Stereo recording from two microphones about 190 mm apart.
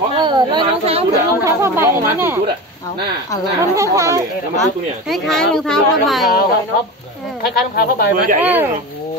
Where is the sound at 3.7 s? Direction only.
15° right (ahead or behind).